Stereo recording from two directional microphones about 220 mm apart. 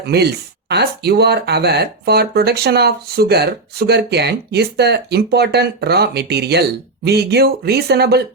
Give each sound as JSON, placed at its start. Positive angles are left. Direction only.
{"t": 0.0, "sound": "speech", "side_deg": -50}